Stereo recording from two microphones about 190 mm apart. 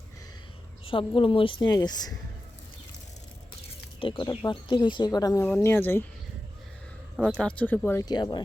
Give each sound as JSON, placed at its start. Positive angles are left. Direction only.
{"t": 0.9, "sound": "speech", "side_deg": 25}
{"t": 4.0, "sound": "speech", "side_deg": 25}
{"t": 7.2, "sound": "speech", "side_deg": 5}